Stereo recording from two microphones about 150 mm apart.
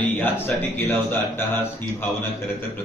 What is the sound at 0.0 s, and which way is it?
Speech, 10° left (ahead or behind).